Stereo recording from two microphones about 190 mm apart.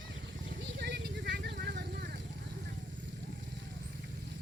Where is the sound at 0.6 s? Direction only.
70° right (ahead or behind).